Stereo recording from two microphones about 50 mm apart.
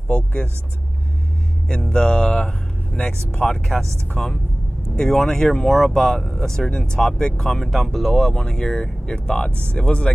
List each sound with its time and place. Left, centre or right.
0.1 s speech: left
1.7 s speech: centre
3.5 s speech: centre
8.2 s speech: centre